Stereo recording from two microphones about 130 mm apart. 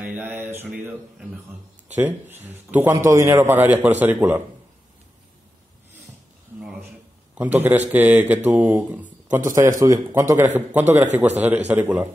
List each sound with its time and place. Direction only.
0.0 s a man's voice: 15° right (ahead or behind)
7.3 s a man's voice: 15° right (ahead or behind)